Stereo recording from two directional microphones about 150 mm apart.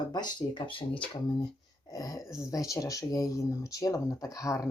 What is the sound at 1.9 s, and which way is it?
Speech, 20° left (ahead or behind).